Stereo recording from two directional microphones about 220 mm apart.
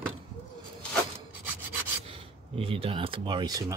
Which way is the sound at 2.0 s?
25° right (ahead or behind).